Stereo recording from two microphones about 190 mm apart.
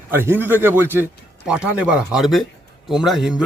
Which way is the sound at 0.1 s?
10° right (ahead or behind).